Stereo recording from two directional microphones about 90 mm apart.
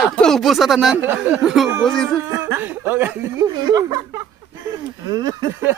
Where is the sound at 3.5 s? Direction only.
50° right (ahead or behind).